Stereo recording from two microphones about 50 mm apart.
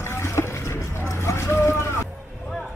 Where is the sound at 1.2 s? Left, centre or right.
Left.